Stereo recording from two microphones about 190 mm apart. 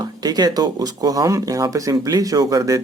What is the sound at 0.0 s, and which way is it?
Speech, 20° right (ahead or behind).